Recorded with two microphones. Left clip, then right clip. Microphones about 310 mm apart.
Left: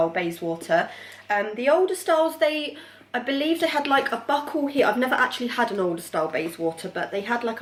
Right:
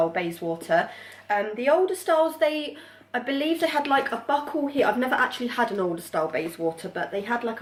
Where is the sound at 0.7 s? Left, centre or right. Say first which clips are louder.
Left 1 dB; centre.